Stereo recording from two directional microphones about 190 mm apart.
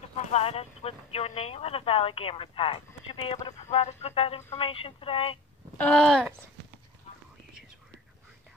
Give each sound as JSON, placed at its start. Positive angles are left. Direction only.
{"t": 0.1, "sound": "speech", "side_deg": 35}
{"t": 5.8, "sound": "speech", "side_deg": 5}